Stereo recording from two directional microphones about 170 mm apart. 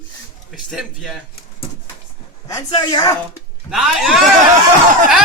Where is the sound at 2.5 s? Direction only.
25° left (ahead or behind).